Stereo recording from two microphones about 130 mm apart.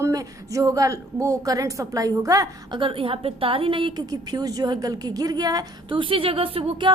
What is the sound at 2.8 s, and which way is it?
A woman's voice, 40° right (ahead or behind).